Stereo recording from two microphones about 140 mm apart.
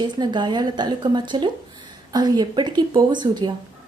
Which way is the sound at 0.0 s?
35° right (ahead or behind).